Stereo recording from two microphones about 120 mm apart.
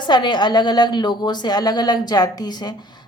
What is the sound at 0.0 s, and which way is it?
A woman's voice, 40° left (ahead or behind).